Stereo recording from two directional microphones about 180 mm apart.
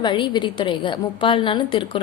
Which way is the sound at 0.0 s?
25° left (ahead or behind).